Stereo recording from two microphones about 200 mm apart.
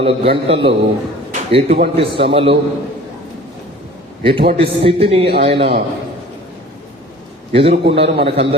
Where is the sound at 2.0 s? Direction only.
25° right (ahead or behind).